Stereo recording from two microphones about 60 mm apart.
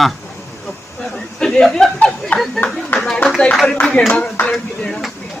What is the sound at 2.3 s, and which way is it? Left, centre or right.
Speech, left.